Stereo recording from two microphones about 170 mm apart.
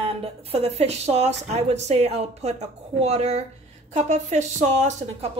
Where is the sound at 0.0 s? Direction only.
35° right (ahead or behind).